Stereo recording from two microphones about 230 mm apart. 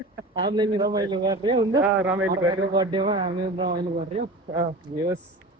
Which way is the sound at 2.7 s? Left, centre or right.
Centre.